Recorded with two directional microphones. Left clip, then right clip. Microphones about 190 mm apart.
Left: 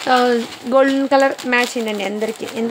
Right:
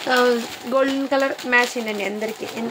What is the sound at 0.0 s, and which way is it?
Speech, 35° left (ahead or behind).